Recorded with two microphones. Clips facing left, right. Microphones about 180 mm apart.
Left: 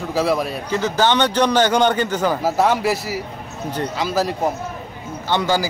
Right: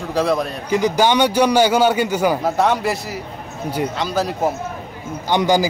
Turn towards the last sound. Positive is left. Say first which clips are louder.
# right 3 dB
turn(degrees=-15)  # may be behind; listen again after turning